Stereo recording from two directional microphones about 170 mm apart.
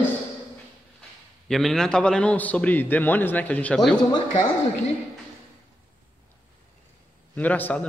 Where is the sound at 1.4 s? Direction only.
Centre (ahead or behind).